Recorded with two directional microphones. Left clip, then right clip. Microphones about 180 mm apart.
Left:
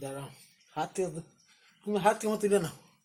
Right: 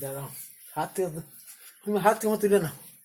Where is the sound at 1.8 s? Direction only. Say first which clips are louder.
Right 4 dB; 10° right (ahead or behind).